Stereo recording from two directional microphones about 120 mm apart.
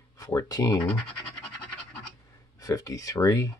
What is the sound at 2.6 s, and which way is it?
Speech, 30° left (ahead or behind).